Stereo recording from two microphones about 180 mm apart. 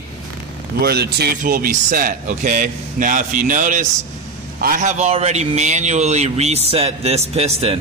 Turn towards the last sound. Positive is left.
turn(degrees=-35)  # may be behind; listen again after turning